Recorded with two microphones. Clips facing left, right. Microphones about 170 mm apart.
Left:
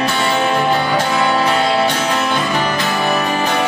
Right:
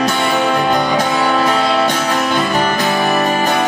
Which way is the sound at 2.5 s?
40° right (ahead or behind).